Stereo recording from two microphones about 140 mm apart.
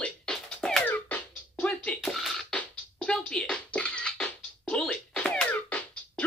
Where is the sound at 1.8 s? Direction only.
Centre (ahead or behind).